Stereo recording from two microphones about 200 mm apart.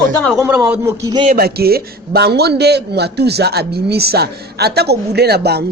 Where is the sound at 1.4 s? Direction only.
50° right (ahead or behind).